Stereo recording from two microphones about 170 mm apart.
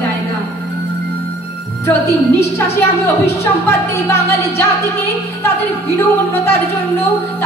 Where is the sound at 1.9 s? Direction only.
15° left (ahead or behind).